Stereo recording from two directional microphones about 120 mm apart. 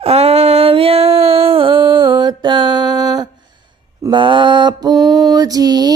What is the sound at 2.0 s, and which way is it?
Mantra, 40° right (ahead or behind).